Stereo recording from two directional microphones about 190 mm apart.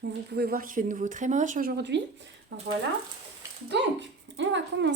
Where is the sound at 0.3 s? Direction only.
55° right (ahead or behind); by 2.7 s 70° right (ahead or behind).